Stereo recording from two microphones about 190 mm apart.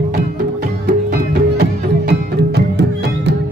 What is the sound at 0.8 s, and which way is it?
Music, 55° right (ahead or behind).